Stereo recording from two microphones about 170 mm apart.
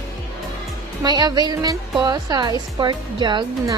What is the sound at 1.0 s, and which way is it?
Speech, 25° right (ahead or behind).